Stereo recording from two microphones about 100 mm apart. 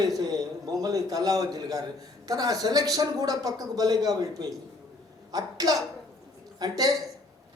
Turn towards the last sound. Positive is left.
turn(degrees=-40)  # may be behind; listen again after turning